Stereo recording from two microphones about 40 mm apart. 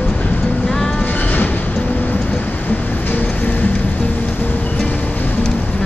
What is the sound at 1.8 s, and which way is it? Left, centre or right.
Vehicle, left.